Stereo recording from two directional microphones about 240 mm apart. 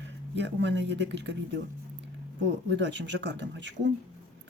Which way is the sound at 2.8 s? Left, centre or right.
Right.